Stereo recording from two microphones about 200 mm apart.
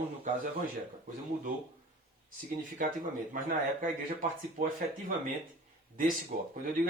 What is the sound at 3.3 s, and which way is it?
Speech, 40° right (ahead or behind).